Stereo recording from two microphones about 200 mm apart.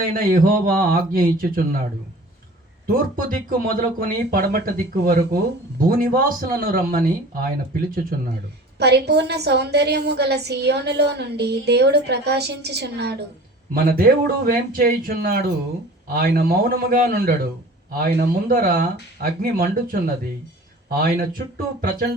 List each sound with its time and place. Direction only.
0.1 s speech: 45° right (ahead or behind)
2.8 s speech: 45° right (ahead or behind)
8.8 s a woman's voice: 55° right (ahead or behind)